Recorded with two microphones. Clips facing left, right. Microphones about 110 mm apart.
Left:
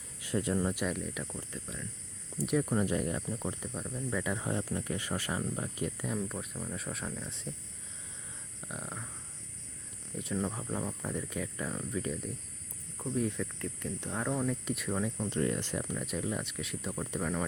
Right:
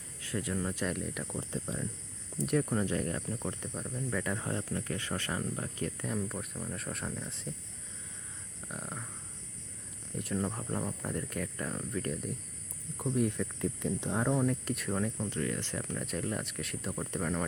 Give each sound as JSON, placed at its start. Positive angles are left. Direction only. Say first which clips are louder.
{"t": 0.2, "sound": "speech", "louder": "left 4 dB", "side_deg": 20}
{"t": 0.9, "sound": "speech", "louder": "even", "side_deg": 0}
{"t": 1.4, "sound": "speech", "louder": "right 6 dB", "side_deg": -25}
{"t": 2.3, "sound": "speech", "louder": "even", "side_deg": 5}
{"t": 3.2, "sound": "speech", "louder": "even", "side_deg": 5}
{"t": 6.1, "sound": "speech", "louder": "even", "side_deg": 0}
{"t": 8.6, "sound": "a sound", "louder": "even", "side_deg": 0}
{"t": 10.2, "sound": "speech", "louder": "even", "side_deg": 0}
{"t": 13.0, "sound": "speech", "louder": "right 2 dB", "side_deg": -15}
{"t": 13.7, "sound": "speech", "louder": "right 3 dB", "side_deg": -15}
{"t": 15.3, "sound": "speech", "louder": "left 3 dB", "side_deg": 20}